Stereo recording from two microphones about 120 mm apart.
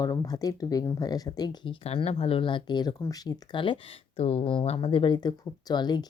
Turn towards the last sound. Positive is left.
turn(degrees=35)  # may be behind; listen again after turning